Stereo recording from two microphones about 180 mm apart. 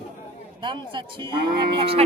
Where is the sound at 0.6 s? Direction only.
25° right (ahead or behind).